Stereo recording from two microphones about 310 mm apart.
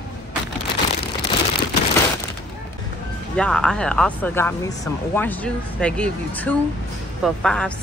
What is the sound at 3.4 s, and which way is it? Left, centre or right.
Speech, centre.